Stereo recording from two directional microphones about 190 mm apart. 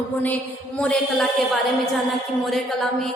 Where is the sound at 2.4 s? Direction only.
Centre (ahead or behind).